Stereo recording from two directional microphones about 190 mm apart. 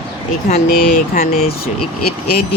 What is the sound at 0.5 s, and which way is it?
Speech, 40° left (ahead or behind).